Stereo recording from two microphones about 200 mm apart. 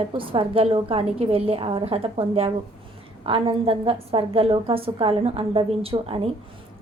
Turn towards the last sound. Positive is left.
turn(degrees=-30)  # may be behind; listen again after turning